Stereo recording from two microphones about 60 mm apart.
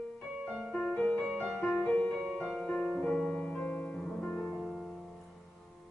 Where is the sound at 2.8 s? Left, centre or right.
Centre.